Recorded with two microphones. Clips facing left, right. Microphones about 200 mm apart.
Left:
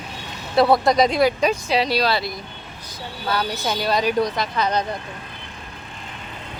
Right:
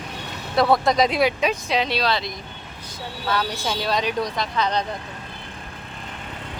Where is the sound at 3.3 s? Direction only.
5° left (ahead or behind).